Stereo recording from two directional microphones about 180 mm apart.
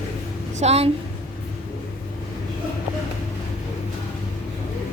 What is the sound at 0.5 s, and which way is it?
Speech, 35° right (ahead or behind).